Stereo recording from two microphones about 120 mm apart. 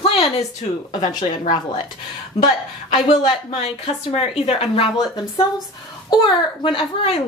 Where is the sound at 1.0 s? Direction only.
90° left.